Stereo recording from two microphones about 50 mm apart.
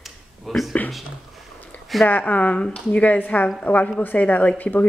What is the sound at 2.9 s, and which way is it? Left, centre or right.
A woman's voice, left.